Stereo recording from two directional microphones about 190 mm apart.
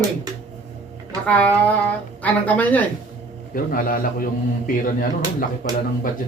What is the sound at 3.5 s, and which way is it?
Speech, 45° left (ahead or behind).